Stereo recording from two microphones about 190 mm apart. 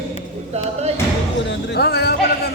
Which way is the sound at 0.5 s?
35° right (ahead or behind).